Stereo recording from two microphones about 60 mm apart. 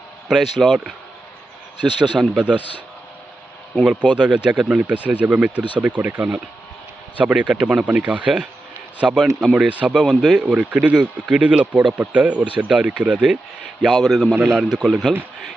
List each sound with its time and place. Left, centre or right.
0.3 s speech: centre
3.8 s speech: centre
10.2 s speech: centre
13.8 s speech: centre
14.6 s speech: centre